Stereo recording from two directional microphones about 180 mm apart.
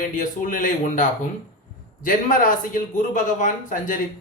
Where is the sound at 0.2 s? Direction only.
45° left (ahead or behind).